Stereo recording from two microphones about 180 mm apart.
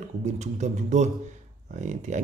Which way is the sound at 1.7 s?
45° right (ahead or behind).